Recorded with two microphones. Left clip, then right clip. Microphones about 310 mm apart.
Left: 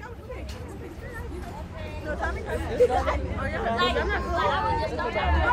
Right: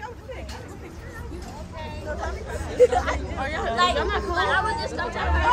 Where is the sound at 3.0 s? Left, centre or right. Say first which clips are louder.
Right 1 dB; right.